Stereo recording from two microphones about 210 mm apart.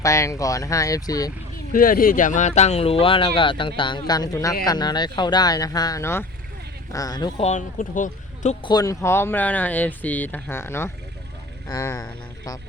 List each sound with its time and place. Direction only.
0.0 s speech: 15° left (ahead or behind)
1.7 s speech: 40° left (ahead or behind); by 7.4 s 20° left (ahead or behind)
7.4 s speech: 35° left (ahead or behind)
8.6 s speech: 20° left (ahead or behind)
11.7 s a sound: 15° left (ahead or behind)